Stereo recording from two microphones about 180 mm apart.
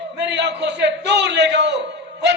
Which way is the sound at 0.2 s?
75° right (ahead or behind).